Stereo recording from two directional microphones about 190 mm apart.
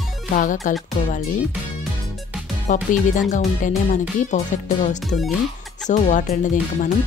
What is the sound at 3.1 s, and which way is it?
Speech, 40° left (ahead or behind).